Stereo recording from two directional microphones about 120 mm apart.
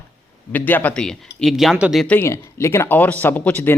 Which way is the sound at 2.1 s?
20° left (ahead or behind).